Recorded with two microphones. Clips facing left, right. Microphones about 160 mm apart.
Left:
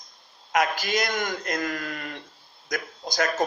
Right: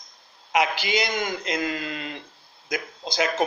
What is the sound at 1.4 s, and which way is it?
Speech, 20° right (ahead or behind).